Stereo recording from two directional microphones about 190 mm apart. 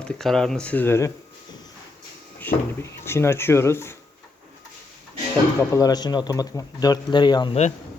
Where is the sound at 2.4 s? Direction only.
10° left (ahead or behind).